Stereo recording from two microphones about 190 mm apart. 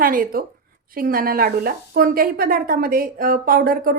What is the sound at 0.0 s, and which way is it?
A woman's voice, 45° right (ahead or behind).